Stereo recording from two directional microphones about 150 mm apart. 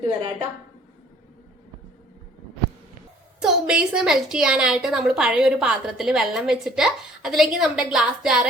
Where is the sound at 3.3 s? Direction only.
5° right (ahead or behind).